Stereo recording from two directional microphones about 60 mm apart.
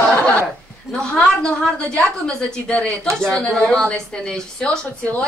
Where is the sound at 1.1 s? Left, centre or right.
Centre.